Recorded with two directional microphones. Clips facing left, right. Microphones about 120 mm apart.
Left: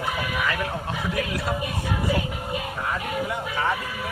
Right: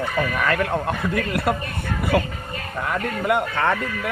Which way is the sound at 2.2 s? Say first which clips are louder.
Right 1 dB; 10° left (ahead or behind).